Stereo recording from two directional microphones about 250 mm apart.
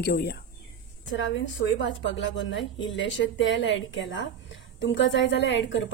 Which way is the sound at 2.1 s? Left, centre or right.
Left.